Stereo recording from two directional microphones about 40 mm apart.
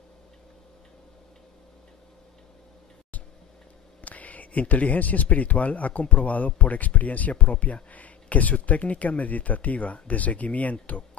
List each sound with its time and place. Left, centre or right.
4.0 s speech: left